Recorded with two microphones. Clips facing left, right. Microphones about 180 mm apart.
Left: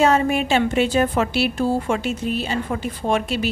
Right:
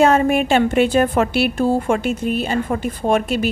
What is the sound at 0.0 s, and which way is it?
A woman's voice, 55° right (ahead or behind).